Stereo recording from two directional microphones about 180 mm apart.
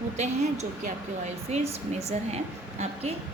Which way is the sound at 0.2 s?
40° right (ahead or behind).